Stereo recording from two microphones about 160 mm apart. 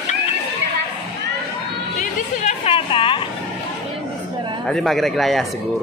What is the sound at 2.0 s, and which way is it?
Speech, 50° left (ahead or behind).